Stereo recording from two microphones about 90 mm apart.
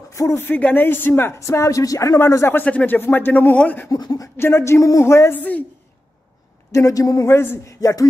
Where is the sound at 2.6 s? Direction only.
20° left (ahead or behind).